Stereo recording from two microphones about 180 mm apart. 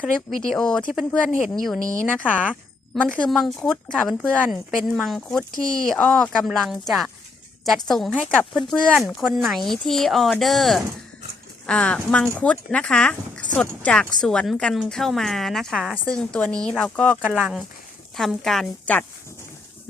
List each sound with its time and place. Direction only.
0.0 s speech: centre (ahead or behind)
1.8 s a woman's voice: 15° right (ahead or behind)
2.4 s a sound: 5° right (ahead or behind)
3.0 s speech: 5° left (ahead or behind)
17.3 s a woman's voice: 10° right (ahead or behind)